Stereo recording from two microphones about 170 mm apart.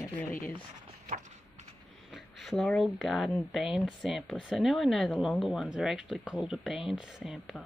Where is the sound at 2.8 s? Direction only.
5° right (ahead or behind).